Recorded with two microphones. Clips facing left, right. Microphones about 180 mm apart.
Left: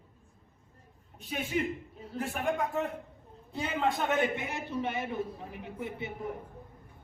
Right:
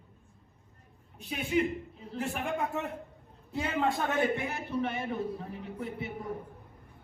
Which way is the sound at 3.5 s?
Centre (ahead or behind).